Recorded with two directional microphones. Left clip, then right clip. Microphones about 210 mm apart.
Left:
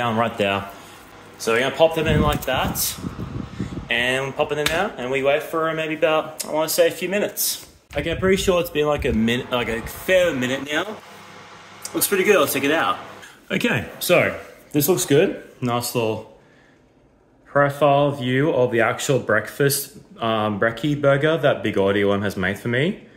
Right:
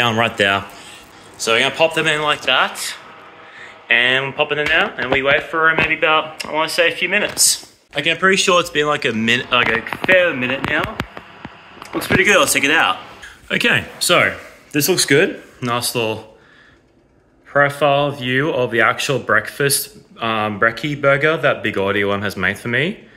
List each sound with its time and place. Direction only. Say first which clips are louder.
0.0 s a man's voice: right 5 dB; 10° right (ahead or behind)
1.4 s speech: right 2 dB; 10° left (ahead or behind)
3.8 s speech: right 7 dB; 15° left (ahead or behind)
7.4 s a man's voice: right 9 dB; 15° left (ahead or behind)
12.3 s a man's voice: right 3 dB; 5° left (ahead or behind)
17.5 s speech: right 2 dB; 10° left (ahead or behind)